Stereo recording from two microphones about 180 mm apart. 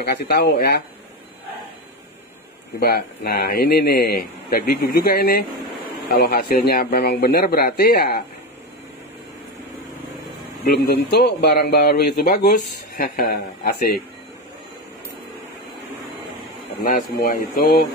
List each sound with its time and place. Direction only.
0.0 s a man's voice: 65° left (ahead or behind)
2.8 s a man's voice: 60° left (ahead or behind)
10.6 s a man's voice: 65° left (ahead or behind)
16.8 s a man's voice: 50° left (ahead or behind)